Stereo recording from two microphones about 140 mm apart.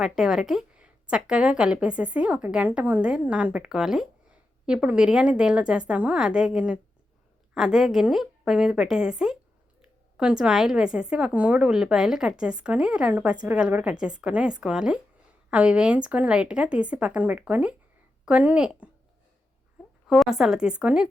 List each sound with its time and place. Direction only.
0.0 s a woman's voice: 5° right (ahead or behind)
20.1 s a woman's voice: 5° right (ahead or behind)